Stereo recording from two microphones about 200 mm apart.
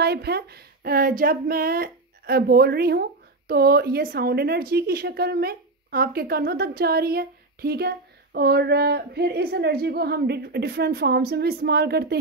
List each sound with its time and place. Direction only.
0.0 s speech: 55° right (ahead or behind)